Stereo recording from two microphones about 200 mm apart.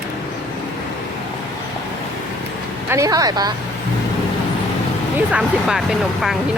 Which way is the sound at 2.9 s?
15° right (ahead or behind).